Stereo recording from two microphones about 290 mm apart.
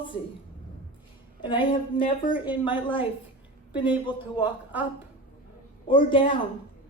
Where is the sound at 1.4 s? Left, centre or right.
Centre.